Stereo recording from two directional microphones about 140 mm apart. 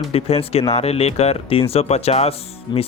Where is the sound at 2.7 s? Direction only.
30° left (ahead or behind).